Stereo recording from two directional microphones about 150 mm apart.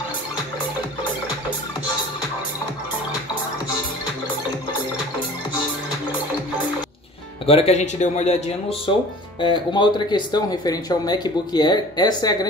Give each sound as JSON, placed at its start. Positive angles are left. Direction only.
{"t": 7.4, "sound": "speech", "side_deg": 45}
{"t": 9.4, "sound": "speech", "side_deg": 30}